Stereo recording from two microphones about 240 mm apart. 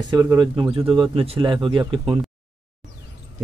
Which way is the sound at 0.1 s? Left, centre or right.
Centre.